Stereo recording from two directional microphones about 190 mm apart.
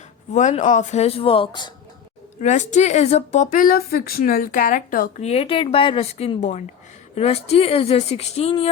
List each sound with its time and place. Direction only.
0.3 s speech: 40° left (ahead or behind)
2.4 s speech: 40° left (ahead or behind)